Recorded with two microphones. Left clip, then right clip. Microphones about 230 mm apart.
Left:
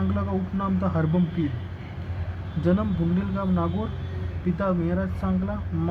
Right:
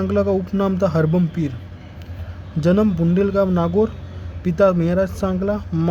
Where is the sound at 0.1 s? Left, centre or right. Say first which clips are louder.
Right 11 dB; right.